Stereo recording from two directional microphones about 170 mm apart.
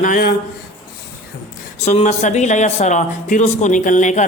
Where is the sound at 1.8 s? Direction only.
40° left (ahead or behind).